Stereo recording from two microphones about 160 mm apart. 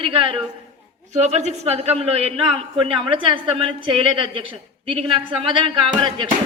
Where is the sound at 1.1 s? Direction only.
45° right (ahead or behind).